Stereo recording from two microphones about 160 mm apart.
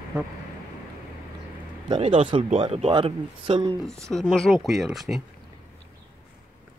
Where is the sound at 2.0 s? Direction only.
35° right (ahead or behind).